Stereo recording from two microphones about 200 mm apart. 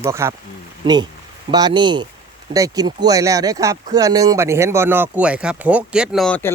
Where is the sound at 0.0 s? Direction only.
15° right (ahead or behind).